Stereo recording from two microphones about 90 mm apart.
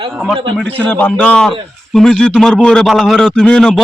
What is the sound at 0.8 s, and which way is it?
A man's voice, 15° left (ahead or behind).